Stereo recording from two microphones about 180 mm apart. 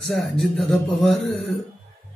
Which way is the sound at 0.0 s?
Centre (ahead or behind).